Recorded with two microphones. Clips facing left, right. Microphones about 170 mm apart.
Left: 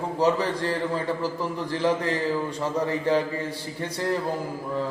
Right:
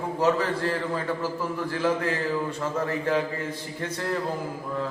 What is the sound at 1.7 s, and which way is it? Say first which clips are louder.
A man's voice: left 2 dB; 15° left (ahead or behind).